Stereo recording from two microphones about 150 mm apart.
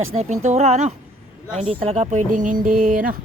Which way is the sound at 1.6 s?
40° right (ahead or behind).